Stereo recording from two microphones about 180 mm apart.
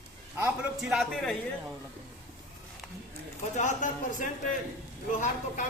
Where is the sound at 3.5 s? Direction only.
45° left (ahead or behind).